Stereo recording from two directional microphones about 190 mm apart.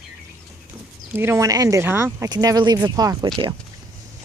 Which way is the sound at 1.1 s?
10° right (ahead or behind).